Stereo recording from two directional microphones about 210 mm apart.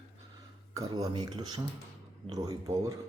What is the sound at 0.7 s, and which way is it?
Speech, 15° right (ahead or behind).